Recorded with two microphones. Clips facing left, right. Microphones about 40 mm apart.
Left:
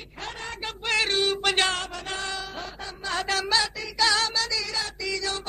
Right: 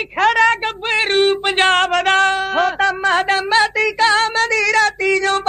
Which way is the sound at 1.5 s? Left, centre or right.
Right.